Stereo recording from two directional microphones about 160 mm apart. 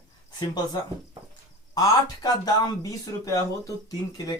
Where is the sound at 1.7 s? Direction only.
20° left (ahead or behind).